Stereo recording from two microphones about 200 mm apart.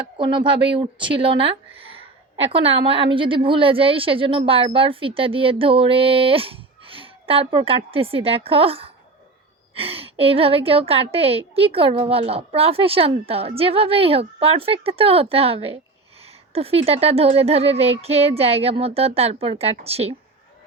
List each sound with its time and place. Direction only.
0.2 s a woman's voice: 25° right (ahead or behind)